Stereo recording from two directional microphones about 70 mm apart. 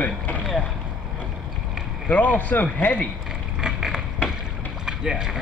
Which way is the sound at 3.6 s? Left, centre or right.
Centre.